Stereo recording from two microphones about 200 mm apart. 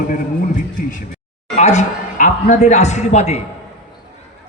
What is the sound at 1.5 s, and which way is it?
Speech, 35° left (ahead or behind).